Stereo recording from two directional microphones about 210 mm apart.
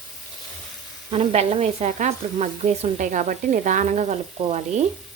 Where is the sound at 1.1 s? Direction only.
30° right (ahead or behind).